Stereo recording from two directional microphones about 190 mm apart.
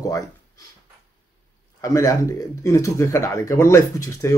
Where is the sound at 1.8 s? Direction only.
15° left (ahead or behind).